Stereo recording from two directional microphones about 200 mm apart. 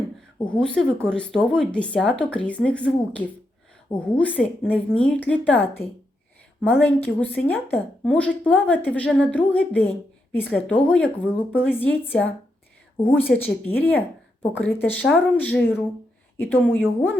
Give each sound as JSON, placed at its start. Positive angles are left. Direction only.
{"t": 0.4, "sound": "speech", "side_deg": 5}